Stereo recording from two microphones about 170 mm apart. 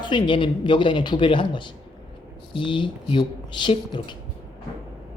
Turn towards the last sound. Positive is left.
turn(degrees=30)  # may be behind; listen again after turning